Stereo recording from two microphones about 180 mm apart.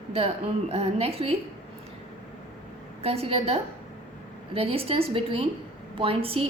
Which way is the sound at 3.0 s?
35° right (ahead or behind).